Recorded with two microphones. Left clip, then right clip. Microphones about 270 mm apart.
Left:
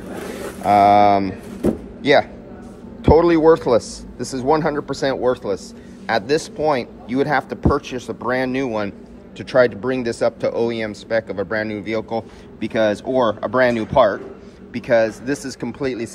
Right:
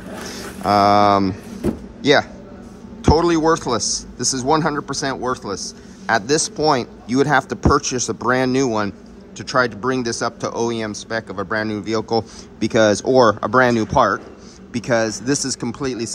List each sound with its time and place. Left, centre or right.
0.7 s a man's voice: centre
2.0 s a sound: centre
3.0 s a man's voice: centre